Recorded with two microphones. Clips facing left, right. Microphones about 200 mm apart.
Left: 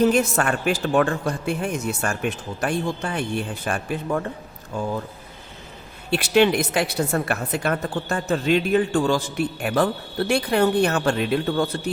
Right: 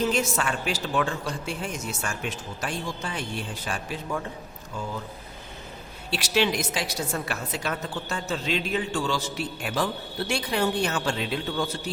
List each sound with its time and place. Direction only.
0.0 s a woman's voice: 55° left (ahead or behind)
6.1 s a woman's voice: 55° left (ahead or behind)